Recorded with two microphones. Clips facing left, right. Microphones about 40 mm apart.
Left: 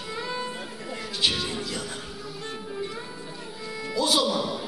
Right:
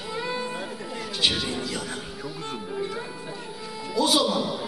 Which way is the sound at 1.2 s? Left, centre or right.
Right.